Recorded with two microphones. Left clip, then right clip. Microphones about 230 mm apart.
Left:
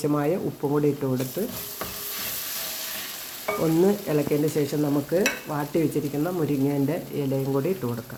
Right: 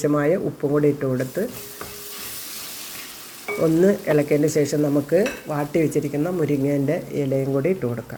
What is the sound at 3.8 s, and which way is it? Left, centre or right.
Speech, centre.